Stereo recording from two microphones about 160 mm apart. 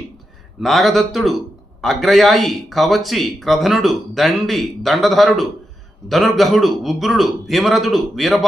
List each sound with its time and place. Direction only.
0.6 s speech: centre (ahead or behind)